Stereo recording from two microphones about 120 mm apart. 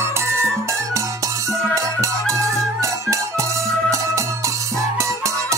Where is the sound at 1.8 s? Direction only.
25° right (ahead or behind).